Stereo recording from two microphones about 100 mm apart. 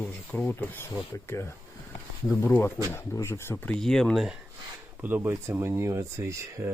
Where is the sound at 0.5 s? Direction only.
25° left (ahead or behind).